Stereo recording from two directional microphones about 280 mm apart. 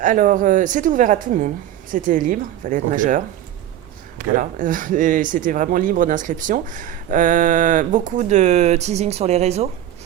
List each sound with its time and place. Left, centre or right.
0.0 s speech: right
4.4 s speech: right